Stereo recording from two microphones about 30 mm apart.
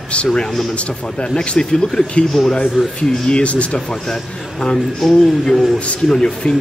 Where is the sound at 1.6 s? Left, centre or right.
Left.